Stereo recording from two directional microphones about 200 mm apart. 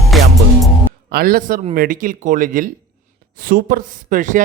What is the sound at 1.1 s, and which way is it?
A man's voice, 45° right (ahead or behind).